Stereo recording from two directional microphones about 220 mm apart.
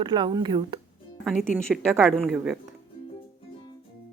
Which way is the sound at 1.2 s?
Centre (ahead or behind).